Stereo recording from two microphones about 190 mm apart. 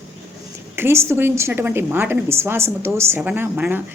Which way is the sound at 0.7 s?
15° right (ahead or behind).